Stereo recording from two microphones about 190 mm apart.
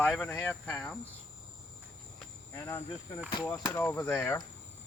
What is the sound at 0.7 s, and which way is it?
Speech, 5° left (ahead or behind).